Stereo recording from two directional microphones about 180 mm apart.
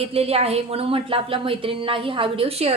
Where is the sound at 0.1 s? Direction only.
35° right (ahead or behind).